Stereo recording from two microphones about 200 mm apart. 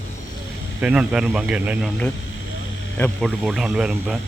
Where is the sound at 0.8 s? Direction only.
5° right (ahead or behind).